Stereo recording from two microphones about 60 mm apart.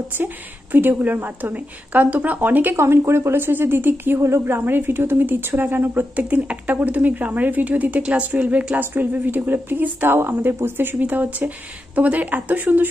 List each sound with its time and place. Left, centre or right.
0.2 s speech: right
2.7 s a woman's voice: right